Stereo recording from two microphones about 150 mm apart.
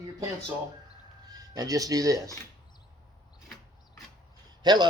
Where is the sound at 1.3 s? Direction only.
25° right (ahead or behind).